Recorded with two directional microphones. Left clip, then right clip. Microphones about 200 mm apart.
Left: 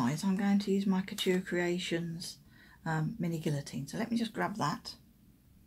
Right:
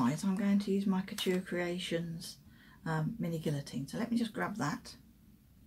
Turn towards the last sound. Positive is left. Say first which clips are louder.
# left 3 dB
turn(degrees=15)  # may be behind; listen again after turning